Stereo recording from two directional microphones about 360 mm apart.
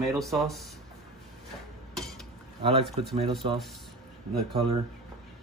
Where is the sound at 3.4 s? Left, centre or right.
Centre.